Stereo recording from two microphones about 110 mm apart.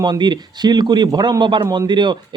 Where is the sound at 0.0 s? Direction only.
45° right (ahead or behind).